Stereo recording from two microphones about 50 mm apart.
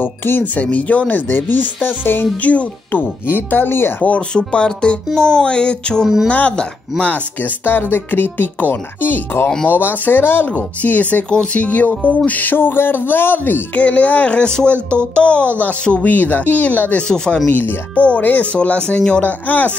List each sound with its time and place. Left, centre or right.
0.0 s speech: left
4.3 s speech: centre
6.2 s speech: left
7.4 s speech: left
10.8 s speech: left
13.7 s speech: left
16.0 s speech: left
17.1 s speech: centre
17.5 s speech: left
18.8 s speech: centre
19.2 s speech: left